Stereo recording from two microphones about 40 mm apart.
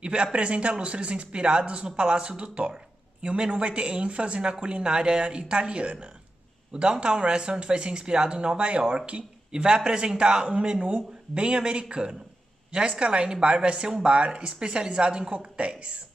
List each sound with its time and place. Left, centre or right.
0.0 s a woman's voice: right